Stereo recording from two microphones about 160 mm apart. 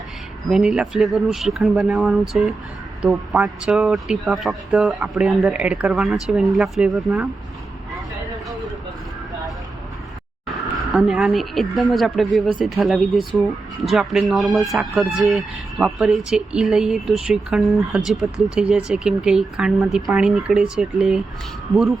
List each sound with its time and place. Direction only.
0.5 s speech: 5° right (ahead or behind)
10.9 s speech: 5° right (ahead or behind)